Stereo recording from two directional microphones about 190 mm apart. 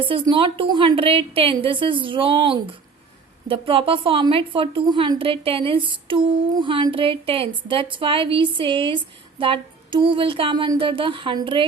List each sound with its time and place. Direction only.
0.0 s a woman's voice: 25° right (ahead or behind)